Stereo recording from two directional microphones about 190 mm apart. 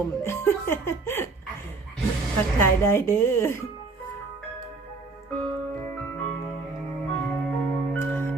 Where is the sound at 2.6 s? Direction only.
15° left (ahead or behind).